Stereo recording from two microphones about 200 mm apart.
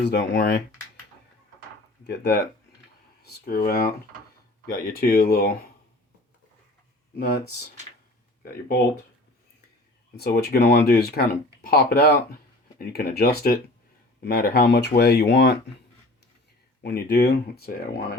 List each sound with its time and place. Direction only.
0.0 s speech: 55° left (ahead or behind)
2.0 s speech: 55° left (ahead or behind)
7.2 s speech: 50° left (ahead or behind)
10.2 s speech: 50° left (ahead or behind)
16.8 s speech: 55° left (ahead or behind)